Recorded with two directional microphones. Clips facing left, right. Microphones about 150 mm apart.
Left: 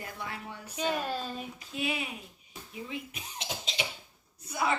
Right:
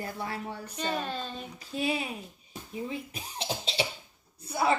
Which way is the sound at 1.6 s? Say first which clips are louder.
Right 5 dB; 35° right (ahead or behind).